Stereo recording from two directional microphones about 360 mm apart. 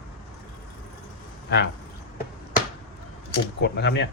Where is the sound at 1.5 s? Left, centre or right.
Left.